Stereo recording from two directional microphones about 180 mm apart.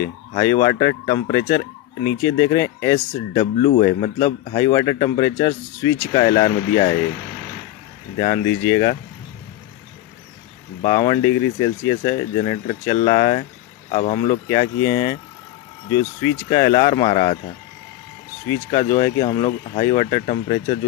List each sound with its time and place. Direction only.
0.4 s speech: 20° left (ahead or behind)
8.5 s speech: 20° left (ahead or behind)
10.8 s speech: 25° left (ahead or behind)
18.5 s speech: 25° left (ahead or behind)